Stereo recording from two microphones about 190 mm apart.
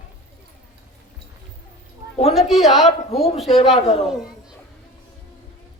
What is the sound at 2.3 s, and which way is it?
Speech, centre (ahead or behind).